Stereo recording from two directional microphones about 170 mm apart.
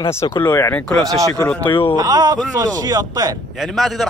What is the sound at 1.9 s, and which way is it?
Speech, 20° right (ahead or behind).